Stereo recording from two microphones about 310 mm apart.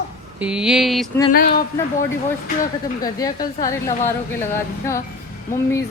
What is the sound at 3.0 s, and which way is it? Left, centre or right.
A woman's voice, centre.